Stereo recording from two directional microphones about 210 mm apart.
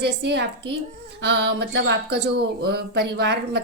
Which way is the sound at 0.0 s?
55° right (ahead or behind).